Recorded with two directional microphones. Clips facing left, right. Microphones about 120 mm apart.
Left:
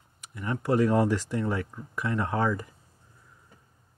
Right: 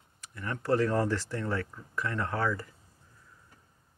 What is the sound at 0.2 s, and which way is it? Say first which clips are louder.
Speech: left 5 dB; 15° left (ahead or behind).